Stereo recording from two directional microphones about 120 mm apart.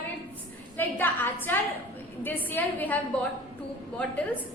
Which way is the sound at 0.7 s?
15° left (ahead or behind).